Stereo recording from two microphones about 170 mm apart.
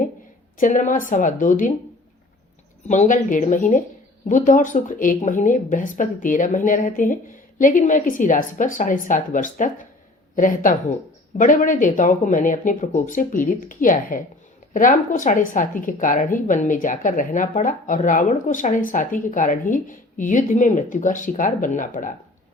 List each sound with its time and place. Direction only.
0.6 s speech: 50° left (ahead or behind)
2.8 s speech: 45° left (ahead or behind)